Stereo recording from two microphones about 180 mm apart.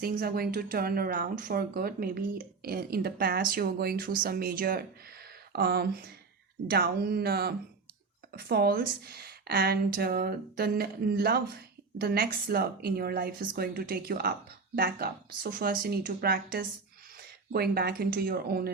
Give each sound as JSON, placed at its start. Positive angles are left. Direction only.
{"t": 0.0, "sound": "a woman's voice", "side_deg": -55}